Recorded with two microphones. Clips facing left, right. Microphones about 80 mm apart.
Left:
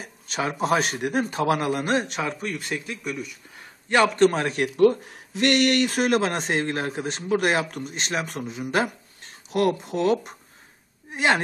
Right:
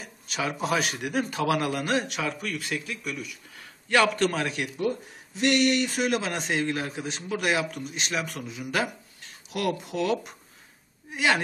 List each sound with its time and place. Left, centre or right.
0.0 s a man's voice: left
4.7 s speech: left